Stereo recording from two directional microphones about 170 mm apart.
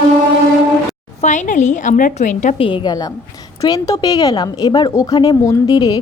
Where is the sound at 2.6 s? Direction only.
30° left (ahead or behind).